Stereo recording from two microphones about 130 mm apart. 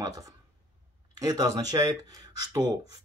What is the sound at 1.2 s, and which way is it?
Speech, 30° right (ahead or behind).